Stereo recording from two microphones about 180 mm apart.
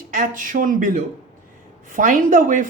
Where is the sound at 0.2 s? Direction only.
50° right (ahead or behind).